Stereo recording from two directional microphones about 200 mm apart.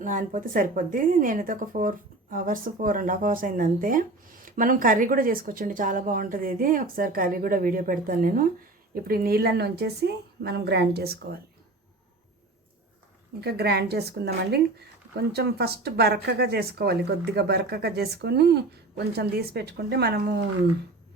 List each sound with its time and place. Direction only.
0.0 s speech: 40° right (ahead or behind)
13.4 s speech: 55° right (ahead or behind)